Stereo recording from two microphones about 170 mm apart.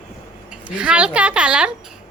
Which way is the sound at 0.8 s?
5° right (ahead or behind).